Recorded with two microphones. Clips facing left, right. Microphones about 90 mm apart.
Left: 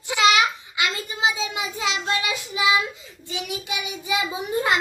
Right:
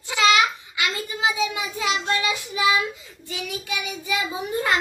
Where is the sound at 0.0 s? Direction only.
20° left (ahead or behind).